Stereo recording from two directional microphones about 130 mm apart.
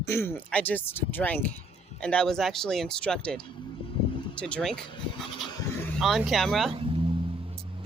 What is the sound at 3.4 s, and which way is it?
Vehicle, 40° left (ahead or behind).